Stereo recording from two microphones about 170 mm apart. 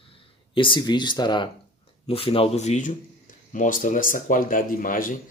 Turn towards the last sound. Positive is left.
turn(degrees=55)  # may be behind; listen again after turning